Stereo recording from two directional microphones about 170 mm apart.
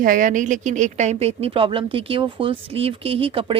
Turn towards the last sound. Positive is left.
turn(degrees=-30)  # may be behind; listen again after turning